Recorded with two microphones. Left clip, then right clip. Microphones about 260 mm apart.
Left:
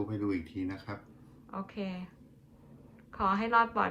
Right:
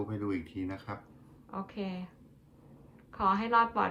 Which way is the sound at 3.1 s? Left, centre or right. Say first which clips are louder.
Even; centre.